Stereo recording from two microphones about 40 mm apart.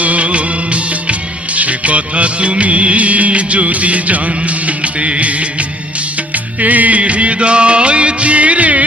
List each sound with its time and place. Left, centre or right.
0.0 s music of bollywood: right